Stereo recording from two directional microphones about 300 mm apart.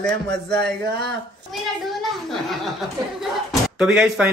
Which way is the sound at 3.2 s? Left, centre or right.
Centre.